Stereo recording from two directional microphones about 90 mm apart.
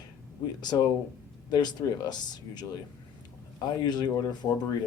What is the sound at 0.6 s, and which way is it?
Speech, 50° left (ahead or behind).